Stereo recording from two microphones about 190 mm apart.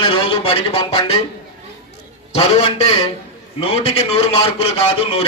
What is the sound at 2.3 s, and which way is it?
A man's voice, 30° left (ahead or behind).